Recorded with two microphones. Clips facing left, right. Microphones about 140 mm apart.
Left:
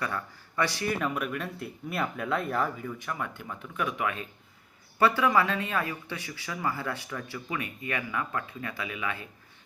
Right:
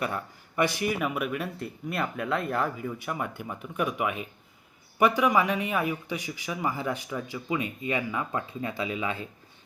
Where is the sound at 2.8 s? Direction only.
15° right (ahead or behind).